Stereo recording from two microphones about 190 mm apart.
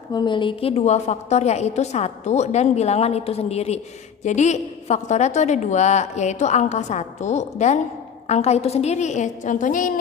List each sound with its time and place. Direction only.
0.1 s a woman's voice: 25° left (ahead or behind); by 9.9 s 45° left (ahead or behind)